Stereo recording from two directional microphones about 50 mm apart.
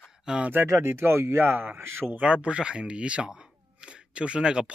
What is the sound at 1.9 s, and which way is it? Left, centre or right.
Speech, right.